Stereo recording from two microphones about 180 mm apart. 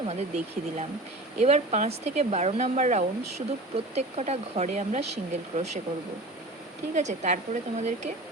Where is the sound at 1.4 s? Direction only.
40° right (ahead or behind).